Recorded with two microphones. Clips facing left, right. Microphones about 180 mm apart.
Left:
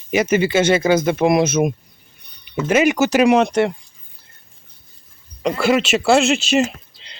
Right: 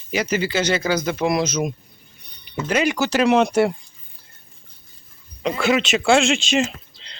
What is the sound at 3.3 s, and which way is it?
Speech, 5° right (ahead or behind).